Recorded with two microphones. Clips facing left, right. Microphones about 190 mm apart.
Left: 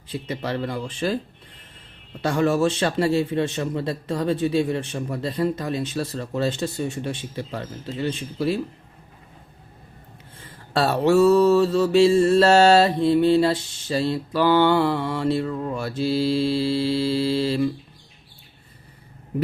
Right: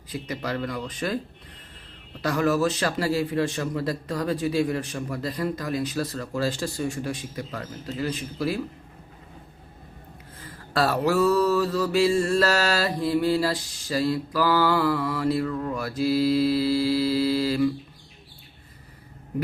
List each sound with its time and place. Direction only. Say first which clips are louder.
0.1 s mantra: left 2 dB; 30° left (ahead or behind)
2.2 s mantra: left 2 dB; 25° left (ahead or behind)
10.3 s mantra: left 2 dB; 25° left (ahead or behind)